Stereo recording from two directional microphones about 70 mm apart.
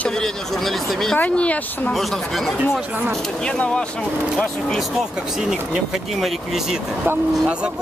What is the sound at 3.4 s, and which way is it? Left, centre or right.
Speech, centre.